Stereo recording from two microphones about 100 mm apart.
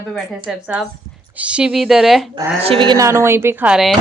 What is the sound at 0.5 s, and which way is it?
A woman's voice, 5° right (ahead or behind).